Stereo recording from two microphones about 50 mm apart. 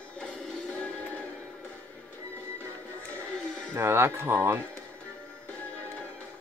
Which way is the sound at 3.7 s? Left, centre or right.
Right.